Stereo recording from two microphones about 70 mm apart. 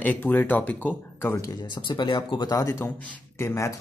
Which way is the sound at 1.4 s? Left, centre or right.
Left.